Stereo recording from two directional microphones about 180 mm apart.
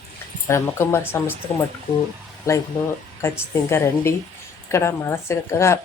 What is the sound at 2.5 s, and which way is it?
A woman's voice, 15° left (ahead or behind).